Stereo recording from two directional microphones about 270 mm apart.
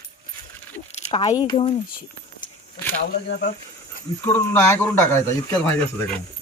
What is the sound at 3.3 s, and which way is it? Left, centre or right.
Speech, left.